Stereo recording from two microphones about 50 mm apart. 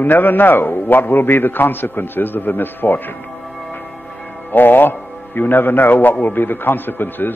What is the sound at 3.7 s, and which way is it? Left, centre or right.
Music, left.